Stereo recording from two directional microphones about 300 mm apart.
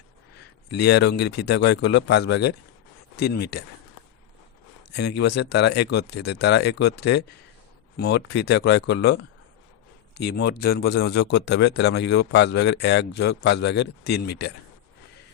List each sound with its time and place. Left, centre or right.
0.7 s a man's voice: left
4.9 s a man's voice: left